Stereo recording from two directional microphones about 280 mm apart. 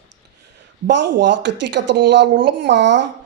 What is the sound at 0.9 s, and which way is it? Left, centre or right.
Speech, right.